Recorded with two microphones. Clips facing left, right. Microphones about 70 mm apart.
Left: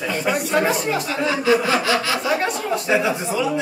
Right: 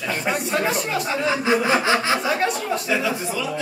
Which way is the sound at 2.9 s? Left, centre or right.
Left.